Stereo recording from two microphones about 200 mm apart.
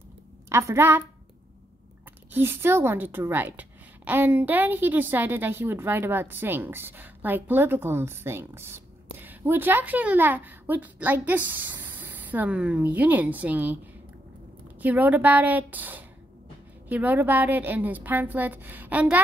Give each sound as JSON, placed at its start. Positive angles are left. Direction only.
{"t": 0.5, "sound": "a woman's voice", "side_deg": -15}
{"t": 2.3, "sound": "a woman's voice", "side_deg": -10}
{"t": 14.8, "sound": "a woman's voice", "side_deg": -10}